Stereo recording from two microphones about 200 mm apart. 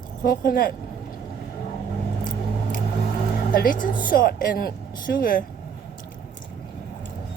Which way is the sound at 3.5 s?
45° left (ahead or behind).